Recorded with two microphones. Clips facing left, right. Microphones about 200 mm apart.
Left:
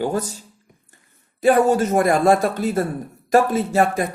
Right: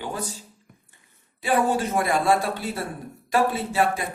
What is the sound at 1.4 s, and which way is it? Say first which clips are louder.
Speech: left 7 dB; 45° left (ahead or behind).